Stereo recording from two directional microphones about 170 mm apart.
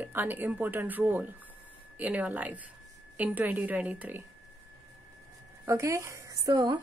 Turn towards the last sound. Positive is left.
turn(degrees=-20)  # may be behind; listen again after turning